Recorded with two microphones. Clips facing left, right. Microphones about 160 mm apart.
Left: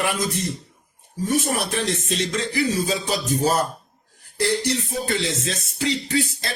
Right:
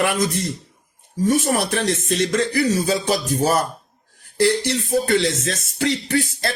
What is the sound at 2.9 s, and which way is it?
Music, 60° right (ahead or behind).